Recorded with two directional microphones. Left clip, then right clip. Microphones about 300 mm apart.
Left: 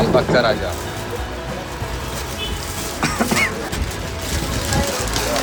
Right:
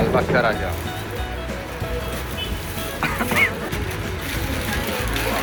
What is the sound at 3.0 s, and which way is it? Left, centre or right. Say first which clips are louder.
Goose: left 1 dB; centre.